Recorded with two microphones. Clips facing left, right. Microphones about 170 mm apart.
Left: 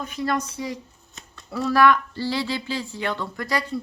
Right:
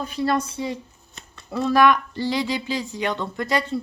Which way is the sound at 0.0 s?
30° right (ahead or behind).